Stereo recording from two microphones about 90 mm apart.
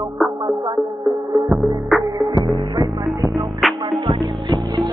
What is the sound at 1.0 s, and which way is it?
Music, 60° right (ahead or behind).